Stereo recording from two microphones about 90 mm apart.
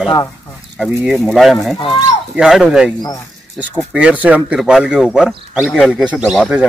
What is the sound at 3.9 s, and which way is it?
Speech, 10° right (ahead or behind).